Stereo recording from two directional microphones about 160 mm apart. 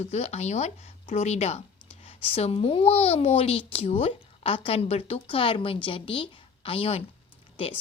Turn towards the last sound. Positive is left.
turn(degrees=35)  # may be behind; listen again after turning